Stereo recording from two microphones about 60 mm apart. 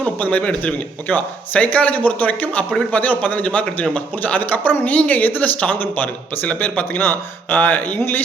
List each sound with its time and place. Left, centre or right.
0.0 s a man's voice: left